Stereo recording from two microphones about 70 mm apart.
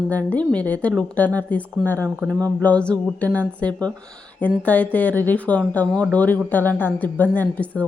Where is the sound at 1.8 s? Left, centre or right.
Centre.